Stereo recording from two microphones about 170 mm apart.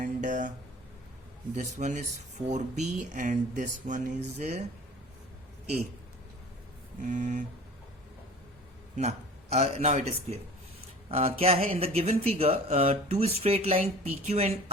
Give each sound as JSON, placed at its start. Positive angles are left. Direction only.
{"t": 0.0, "sound": "a sound", "side_deg": -45}
{"t": 1.5, "sound": "speech", "side_deg": -45}
{"t": 7.0, "sound": "speech", "side_deg": -45}
{"t": 9.0, "sound": "a man's voice", "side_deg": -40}